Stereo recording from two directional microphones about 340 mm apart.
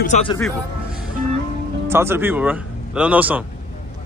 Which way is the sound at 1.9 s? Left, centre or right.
Centre.